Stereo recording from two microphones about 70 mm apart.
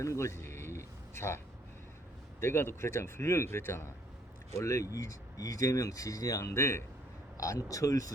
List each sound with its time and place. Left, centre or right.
0.0 s a sound: left
2.4 s a man's voice: left
7.3 s speech: left